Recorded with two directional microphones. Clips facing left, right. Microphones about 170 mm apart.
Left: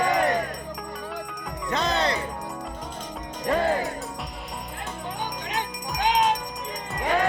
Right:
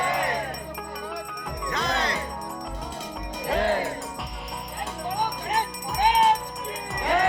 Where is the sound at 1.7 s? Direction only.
25° left (ahead or behind).